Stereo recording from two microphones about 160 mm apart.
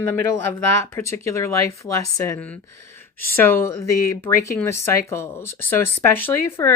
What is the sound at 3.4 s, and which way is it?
Speech, 15° left (ahead or behind).